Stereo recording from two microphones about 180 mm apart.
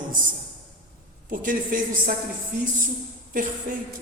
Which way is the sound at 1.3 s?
50° right (ahead or behind).